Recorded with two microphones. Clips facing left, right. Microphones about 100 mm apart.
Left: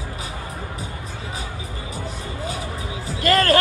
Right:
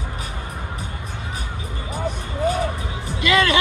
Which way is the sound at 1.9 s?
60° right (ahead or behind).